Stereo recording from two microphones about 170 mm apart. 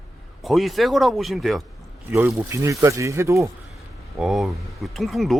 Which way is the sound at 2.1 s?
10° right (ahead or behind).